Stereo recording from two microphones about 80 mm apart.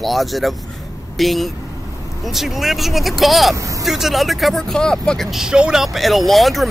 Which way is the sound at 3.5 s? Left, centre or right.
Right.